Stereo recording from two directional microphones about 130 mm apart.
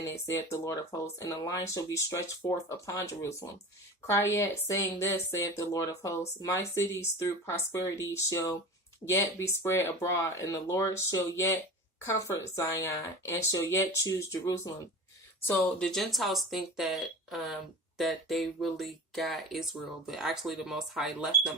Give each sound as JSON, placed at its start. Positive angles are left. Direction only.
{"t": 0.0, "sound": "speech", "side_deg": 20}
{"t": 15.5, "sound": "speech", "side_deg": 5}